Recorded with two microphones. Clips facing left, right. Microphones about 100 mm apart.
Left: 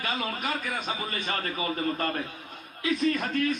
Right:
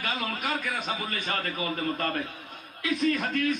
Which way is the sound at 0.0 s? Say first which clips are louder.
Even; 35° left (ahead or behind).